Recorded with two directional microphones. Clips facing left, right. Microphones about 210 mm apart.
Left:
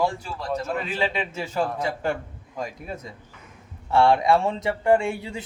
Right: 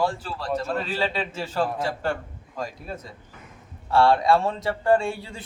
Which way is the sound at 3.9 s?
20° left (ahead or behind).